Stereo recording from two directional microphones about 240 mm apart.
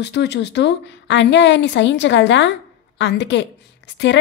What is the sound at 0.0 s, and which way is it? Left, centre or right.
A woman's voice, left.